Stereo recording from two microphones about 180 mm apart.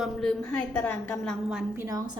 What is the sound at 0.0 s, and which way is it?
A woman's voice, centre (ahead or behind).